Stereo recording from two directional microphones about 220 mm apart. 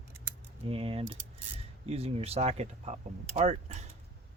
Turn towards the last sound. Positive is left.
turn(degrees=-30)  # may be behind; listen again after turning